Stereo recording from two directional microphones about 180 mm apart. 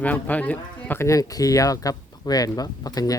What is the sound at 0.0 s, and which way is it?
Speech, 10° left (ahead or behind).